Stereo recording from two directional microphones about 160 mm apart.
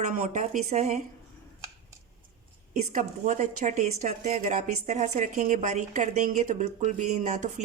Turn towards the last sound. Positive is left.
turn(degrees=-50)  # may be behind; listen again after turning